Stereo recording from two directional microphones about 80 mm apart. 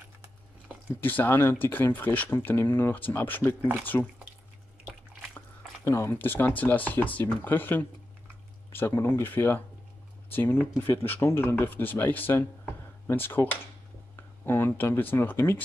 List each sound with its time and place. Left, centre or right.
1.0 s speech: left
5.9 s speech: left
6.1 s speech: left